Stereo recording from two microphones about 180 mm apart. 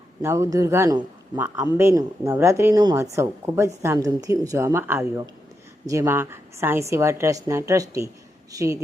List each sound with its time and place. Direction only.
0.2 s speech: 15° right (ahead or behind)